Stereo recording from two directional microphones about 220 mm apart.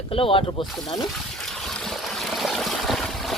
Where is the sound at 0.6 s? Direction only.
Centre (ahead or behind).